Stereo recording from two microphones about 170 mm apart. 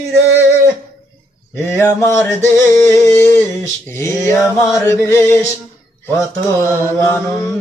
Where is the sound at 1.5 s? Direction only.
15° left (ahead or behind).